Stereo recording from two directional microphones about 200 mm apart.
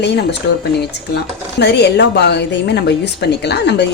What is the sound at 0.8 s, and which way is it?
Speech, 55° left (ahead or behind).